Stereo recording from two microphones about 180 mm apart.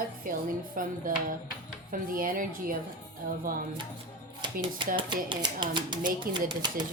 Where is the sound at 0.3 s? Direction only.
50° right (ahead or behind).